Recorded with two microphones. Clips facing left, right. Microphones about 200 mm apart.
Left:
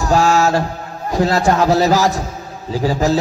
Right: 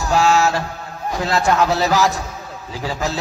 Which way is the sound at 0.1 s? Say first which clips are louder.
Left 2 dB; 45° left (ahead or behind).